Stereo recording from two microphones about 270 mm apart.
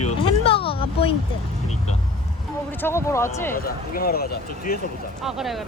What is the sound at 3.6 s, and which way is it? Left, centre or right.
Speech, left.